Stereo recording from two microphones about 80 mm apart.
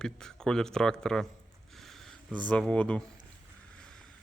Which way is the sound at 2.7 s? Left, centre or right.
Centre.